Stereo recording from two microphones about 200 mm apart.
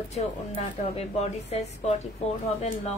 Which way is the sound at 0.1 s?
35° left (ahead or behind).